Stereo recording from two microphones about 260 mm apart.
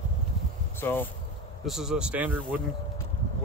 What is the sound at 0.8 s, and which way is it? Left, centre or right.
Speech, centre.